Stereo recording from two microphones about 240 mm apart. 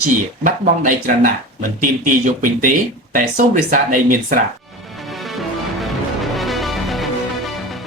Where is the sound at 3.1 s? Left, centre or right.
Right.